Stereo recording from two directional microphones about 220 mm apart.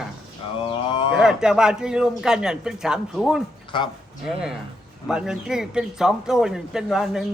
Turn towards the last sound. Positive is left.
turn(degrees=0)  # may be behind; listen again after turning